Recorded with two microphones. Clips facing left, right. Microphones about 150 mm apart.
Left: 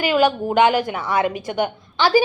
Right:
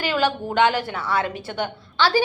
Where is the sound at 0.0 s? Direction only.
15° left (ahead or behind).